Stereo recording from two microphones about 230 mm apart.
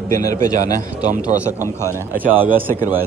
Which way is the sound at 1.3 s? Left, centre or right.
Centre.